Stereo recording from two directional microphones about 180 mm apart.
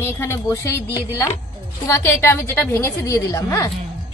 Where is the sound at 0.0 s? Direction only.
15° left (ahead or behind).